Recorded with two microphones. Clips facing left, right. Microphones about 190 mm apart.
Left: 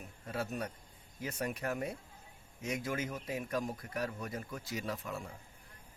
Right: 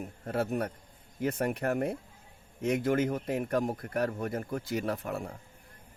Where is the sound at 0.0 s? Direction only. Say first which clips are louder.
Right 8 dB; 55° right (ahead or behind).